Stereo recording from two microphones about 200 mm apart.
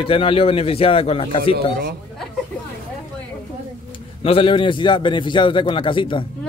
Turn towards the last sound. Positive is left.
turn(degrees=25)  # may be behind; listen again after turning